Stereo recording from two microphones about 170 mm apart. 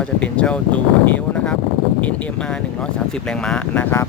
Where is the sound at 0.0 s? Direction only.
5° left (ahead or behind).